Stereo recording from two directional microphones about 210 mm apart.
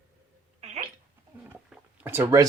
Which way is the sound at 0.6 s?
30° right (ahead or behind).